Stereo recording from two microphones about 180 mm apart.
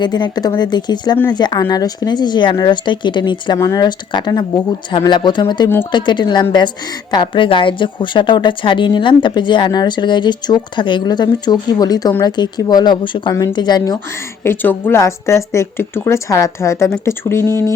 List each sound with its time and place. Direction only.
0.0 s a woman's voice: 25° left (ahead or behind)
14.4 s speech: 10° left (ahead or behind)